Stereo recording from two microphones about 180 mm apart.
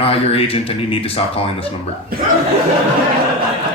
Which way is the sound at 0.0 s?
30° left (ahead or behind).